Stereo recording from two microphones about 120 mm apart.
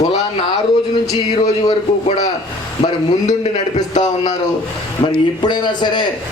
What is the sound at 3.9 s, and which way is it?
Speech, 90° left.